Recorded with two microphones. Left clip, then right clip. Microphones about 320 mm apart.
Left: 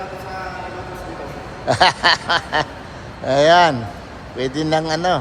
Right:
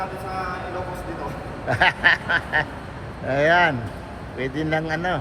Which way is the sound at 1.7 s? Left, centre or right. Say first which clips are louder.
Left 4 dB; centre.